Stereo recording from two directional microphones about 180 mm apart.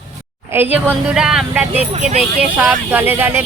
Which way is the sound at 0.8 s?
5° right (ahead or behind).